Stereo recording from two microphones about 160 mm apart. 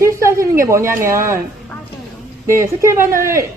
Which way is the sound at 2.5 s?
15° right (ahead or behind).